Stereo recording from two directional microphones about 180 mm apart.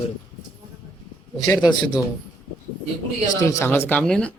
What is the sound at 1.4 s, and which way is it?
Speech, 20° left (ahead or behind).